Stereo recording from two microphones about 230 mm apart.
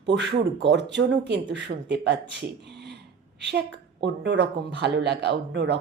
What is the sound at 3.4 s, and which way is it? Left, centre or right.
A woman's voice, right.